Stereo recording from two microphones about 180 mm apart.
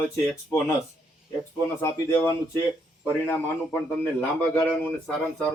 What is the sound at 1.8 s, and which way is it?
A man's voice, 15° left (ahead or behind).